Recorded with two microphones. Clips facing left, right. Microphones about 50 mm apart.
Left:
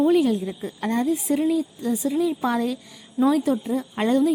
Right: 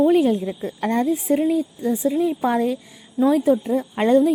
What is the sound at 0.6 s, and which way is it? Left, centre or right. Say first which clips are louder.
Speech: right 3 dB; right.